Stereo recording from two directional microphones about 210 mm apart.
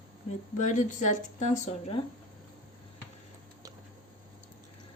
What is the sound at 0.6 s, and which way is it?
A woman's voice, 35° left (ahead or behind).